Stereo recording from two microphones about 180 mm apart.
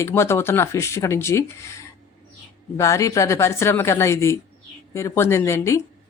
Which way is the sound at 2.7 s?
15° left (ahead or behind).